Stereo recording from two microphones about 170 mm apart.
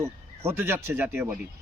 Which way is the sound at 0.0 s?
15° right (ahead or behind).